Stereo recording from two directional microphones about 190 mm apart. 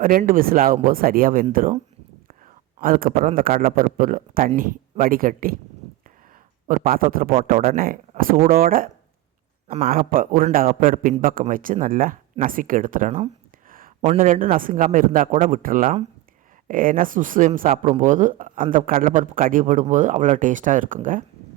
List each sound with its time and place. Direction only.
0.0 s a man's voice: 45° right (ahead or behind)
2.8 s a man's voice: 50° right (ahead or behind)
6.7 s a man's voice: 45° right (ahead or behind)
13.1 s speech: 35° right (ahead or behind)
13.7 s a man's voice: 45° right (ahead or behind)